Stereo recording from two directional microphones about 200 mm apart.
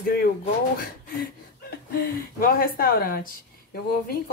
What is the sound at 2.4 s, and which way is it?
Speech, 45° left (ahead or behind).